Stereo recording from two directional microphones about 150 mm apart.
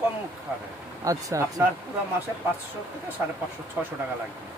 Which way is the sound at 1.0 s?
20° right (ahead or behind).